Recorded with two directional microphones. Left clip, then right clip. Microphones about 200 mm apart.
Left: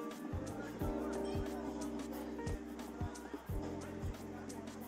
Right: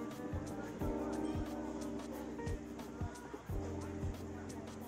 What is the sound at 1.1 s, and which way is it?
Music, centre (ahead or behind).